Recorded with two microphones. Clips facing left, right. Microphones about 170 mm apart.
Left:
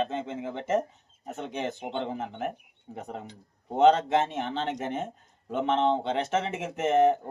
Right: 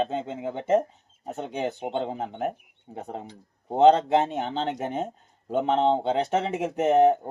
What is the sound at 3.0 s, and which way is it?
A man's voice, 35° right (ahead or behind).